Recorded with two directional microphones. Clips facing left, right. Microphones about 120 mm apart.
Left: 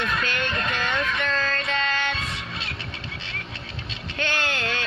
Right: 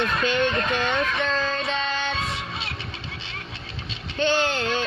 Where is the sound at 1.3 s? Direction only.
20° right (ahead or behind).